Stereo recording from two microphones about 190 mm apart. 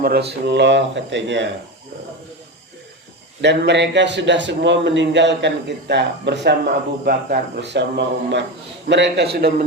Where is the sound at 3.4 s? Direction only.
65° right (ahead or behind).